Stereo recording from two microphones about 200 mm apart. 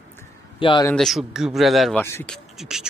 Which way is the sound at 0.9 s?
Centre (ahead or behind).